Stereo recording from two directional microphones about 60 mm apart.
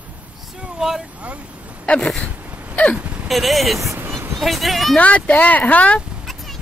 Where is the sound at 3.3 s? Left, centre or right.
Centre.